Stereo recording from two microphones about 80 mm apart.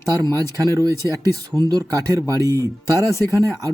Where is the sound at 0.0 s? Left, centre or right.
Right.